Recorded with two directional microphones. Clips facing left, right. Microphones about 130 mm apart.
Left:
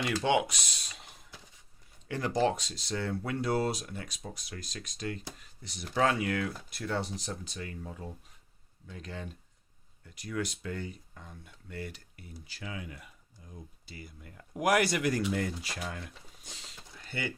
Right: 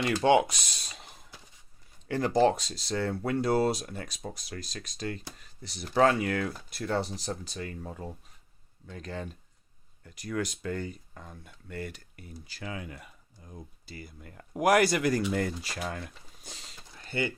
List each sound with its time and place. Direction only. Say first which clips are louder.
0.3 s speech: right 6 dB; 40° right (ahead or behind)
2.0 s speech: right 5 dB; 35° right (ahead or behind)